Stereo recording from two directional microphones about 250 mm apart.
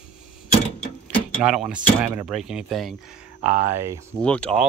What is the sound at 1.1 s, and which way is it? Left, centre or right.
Speech, centre.